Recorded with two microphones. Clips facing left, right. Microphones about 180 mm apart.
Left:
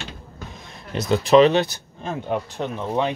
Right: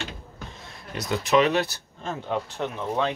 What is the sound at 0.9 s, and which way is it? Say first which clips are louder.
Speech: left 7 dB; 25° left (ahead or behind).